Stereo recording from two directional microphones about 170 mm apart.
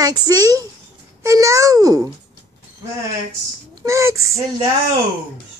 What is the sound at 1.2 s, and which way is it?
Speech, 20° right (ahead or behind).